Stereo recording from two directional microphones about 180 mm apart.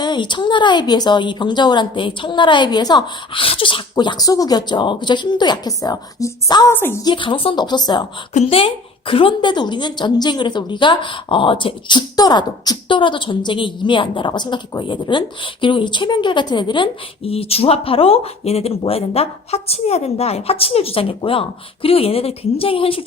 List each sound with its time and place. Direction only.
0.0 s a woman's voice: 25° left (ahead or behind)
7.1 s a woman's voice: 25° left (ahead or behind)
8.3 s a woman's voice: 35° left (ahead or behind)